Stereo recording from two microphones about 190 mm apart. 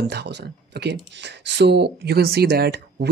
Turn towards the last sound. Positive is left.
turn(degrees=-60)  # may be behind; listen again after turning